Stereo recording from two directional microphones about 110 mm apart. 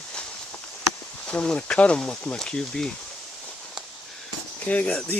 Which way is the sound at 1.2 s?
10° left (ahead or behind).